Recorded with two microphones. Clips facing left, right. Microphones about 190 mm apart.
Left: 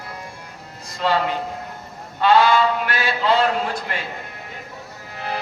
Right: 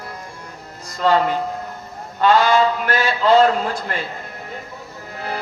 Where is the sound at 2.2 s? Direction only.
45° right (ahead or behind).